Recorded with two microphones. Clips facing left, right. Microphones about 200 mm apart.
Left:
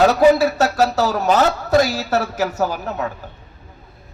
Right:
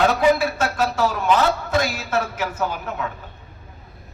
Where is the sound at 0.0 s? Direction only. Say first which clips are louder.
Left 5 dB; 40° left (ahead or behind).